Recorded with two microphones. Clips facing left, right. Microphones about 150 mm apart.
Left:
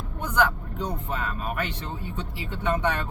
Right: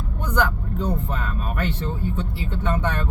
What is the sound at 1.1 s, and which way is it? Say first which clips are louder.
Speech: right 1 dB; 10° left (ahead or behind).